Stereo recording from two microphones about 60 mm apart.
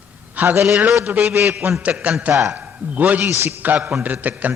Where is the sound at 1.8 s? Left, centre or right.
Right.